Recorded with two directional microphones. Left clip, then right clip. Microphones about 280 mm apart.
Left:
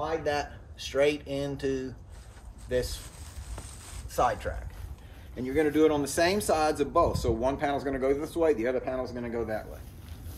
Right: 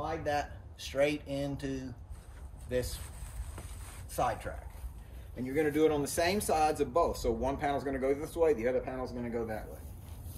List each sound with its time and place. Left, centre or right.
0.0 s speech: centre
4.1 s speech: centre
5.5 s speech: centre